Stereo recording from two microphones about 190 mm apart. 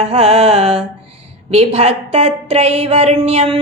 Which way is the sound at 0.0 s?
30° right (ahead or behind).